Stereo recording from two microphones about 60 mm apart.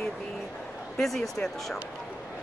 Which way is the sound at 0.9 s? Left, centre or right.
Centre.